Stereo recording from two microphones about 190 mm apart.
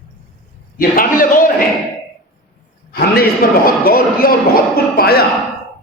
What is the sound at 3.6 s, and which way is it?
Speech, 50° left (ahead or behind).